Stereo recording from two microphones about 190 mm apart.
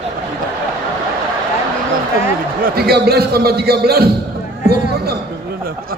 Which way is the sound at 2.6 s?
55° right (ahead or behind).